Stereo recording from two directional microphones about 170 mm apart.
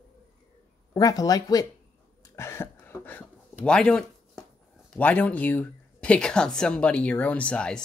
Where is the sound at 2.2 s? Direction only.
15° left (ahead or behind).